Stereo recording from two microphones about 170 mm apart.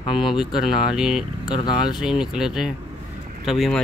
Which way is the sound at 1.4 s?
25° left (ahead or behind).